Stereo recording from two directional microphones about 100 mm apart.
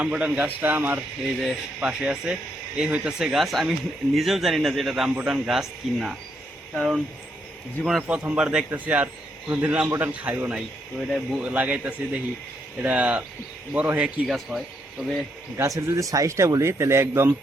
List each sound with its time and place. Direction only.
0.0 s a man's voice: 10° right (ahead or behind)
1.4 s speech: 5° right (ahead or behind)
8.0 s a man's voice: 15° right (ahead or behind)
10.5 s speech: centre (ahead or behind)
11.4 s a man's voice: 15° right (ahead or behind)
14.3 s speech: centre (ahead or behind)
15.5 s speech: 30° right (ahead or behind)